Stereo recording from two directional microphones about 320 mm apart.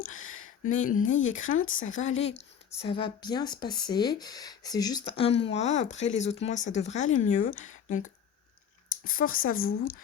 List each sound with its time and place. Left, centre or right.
0.0 s a sound: left
0.8 s speech: left
1.5 s speech: left
2.0 s speech: left
9.0 s speech: left
9.5 s speech: left